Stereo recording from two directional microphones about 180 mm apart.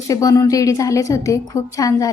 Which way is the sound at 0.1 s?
20° left (ahead or behind).